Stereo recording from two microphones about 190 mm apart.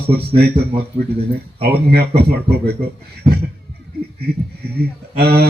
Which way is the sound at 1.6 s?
55° right (ahead or behind).